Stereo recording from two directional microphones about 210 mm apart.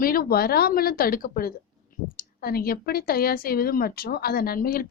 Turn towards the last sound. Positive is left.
turn(degrees=45)  # may be behind; listen again after turning